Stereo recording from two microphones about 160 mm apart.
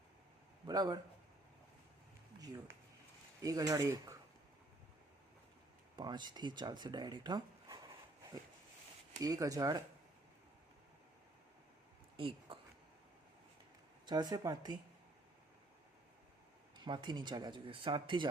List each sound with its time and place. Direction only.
0.6 s a man's voice: 25° right (ahead or behind)
3.4 s speech: 20° right (ahead or behind)
6.0 s speech: 30° right (ahead or behind)
12.1 s a sound: 35° right (ahead or behind)
14.1 s speech: 25° right (ahead or behind)
16.7 s speech: 30° right (ahead or behind)